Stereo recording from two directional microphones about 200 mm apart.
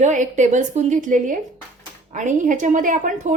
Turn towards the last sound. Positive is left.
turn(degrees=-40)  # may be behind; listen again after turning